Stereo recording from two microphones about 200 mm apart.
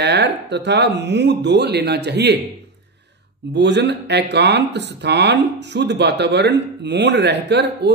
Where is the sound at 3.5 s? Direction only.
60° right (ahead or behind).